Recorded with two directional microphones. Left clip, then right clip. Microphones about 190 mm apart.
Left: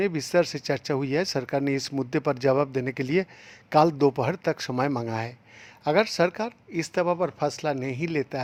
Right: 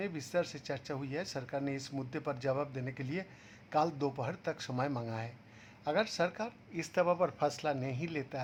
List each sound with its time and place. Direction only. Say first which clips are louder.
0.0 s speech: left 12 dB; 45° left (ahead or behind)